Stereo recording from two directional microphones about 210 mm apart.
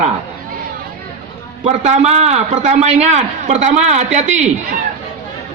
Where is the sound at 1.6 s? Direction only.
30° right (ahead or behind).